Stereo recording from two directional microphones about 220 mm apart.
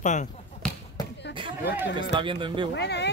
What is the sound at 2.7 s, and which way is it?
Speech, 50° left (ahead or behind).